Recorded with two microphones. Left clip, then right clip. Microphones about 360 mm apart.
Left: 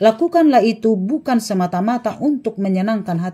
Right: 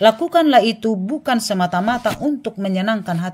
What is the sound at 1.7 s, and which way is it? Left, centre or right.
Speech, right.